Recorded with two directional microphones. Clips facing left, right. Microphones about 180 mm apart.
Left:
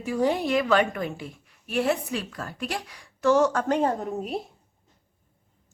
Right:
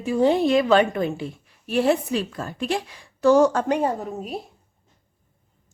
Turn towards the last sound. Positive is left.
turn(degrees=0)  # may be behind; listen again after turning